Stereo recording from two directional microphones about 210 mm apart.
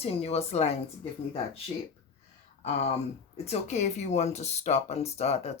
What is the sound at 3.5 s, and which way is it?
Speech, 35° left (ahead or behind).